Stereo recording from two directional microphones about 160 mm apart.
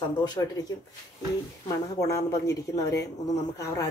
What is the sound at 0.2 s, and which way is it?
Speech, 25° left (ahead or behind).